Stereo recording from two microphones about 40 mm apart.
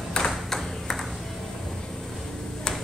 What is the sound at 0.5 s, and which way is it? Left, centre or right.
Ping, centre.